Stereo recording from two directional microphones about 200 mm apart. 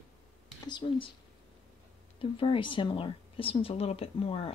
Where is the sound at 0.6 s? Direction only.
25° left (ahead or behind).